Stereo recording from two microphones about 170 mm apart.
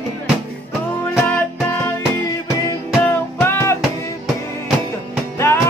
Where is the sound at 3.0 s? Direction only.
15° left (ahead or behind).